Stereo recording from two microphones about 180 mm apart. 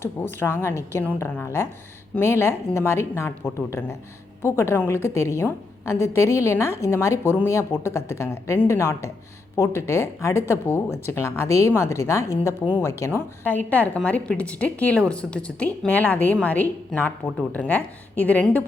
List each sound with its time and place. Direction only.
0.0 s a woman's voice: 10° left (ahead or behind)